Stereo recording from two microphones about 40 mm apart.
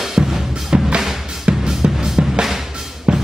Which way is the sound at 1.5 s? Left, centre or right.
Right.